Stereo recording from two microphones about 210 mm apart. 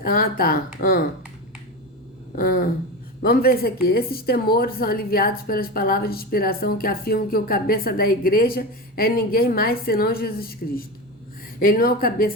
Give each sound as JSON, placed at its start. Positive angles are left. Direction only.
{"t": 0.0, "sound": "a woman's voice", "side_deg": 45}
{"t": 2.3, "sound": "a woman's voice", "side_deg": 40}